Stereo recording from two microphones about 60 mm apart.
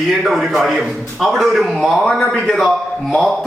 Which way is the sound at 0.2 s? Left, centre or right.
Centre.